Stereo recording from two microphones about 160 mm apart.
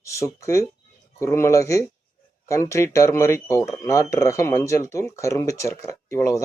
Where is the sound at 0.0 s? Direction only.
20° left (ahead or behind).